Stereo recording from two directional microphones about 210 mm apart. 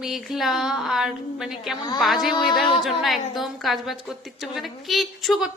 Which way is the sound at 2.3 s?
20° left (ahead or behind).